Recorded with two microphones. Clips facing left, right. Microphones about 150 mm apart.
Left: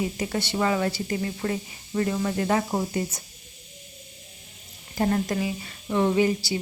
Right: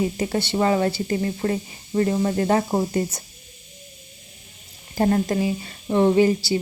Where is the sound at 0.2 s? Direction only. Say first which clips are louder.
Right 4 dB; 30° right (ahead or behind).